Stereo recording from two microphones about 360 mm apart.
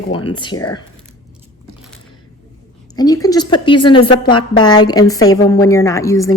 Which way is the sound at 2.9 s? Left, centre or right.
Centre.